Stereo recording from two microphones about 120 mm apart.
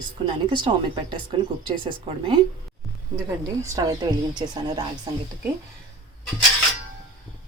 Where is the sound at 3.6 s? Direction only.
30° right (ahead or behind).